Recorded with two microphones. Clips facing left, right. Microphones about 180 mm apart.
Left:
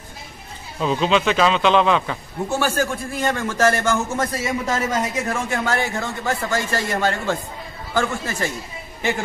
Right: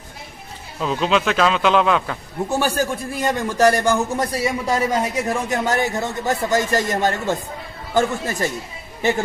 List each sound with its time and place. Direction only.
0.7 s a man's voice: centre (ahead or behind)
2.5 s a man's voice: 15° right (ahead or behind)